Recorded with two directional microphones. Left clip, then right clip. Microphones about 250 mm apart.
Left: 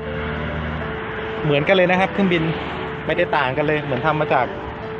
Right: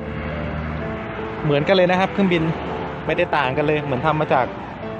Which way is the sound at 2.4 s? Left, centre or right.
Right.